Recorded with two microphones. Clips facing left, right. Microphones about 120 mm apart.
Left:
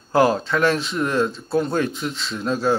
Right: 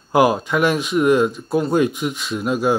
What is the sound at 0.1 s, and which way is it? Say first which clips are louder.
A man's voice: right 2 dB; 15° right (ahead or behind).